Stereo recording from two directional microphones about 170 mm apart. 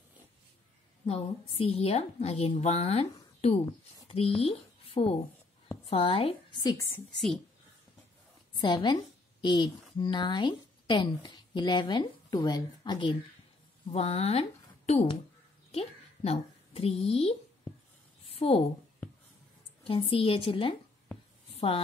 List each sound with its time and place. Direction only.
1.0 s a woman's voice: 35° left (ahead or behind)
6.7 s a woman's voice: 15° left (ahead or behind)
8.5 s a woman's voice: 30° left (ahead or behind)
13.9 s a woman's voice: 35° left (ahead or behind)
15.7 s a woman's voice: 35° left (ahead or behind)
18.4 s a woman's voice: 30° left (ahead or behind)
19.8 s a woman's voice: 35° left (ahead or behind)